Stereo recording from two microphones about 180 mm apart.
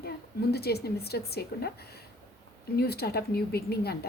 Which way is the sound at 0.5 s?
60° left (ahead or behind).